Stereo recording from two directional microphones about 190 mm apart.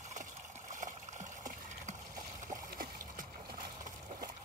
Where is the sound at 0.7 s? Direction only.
40° right (ahead or behind).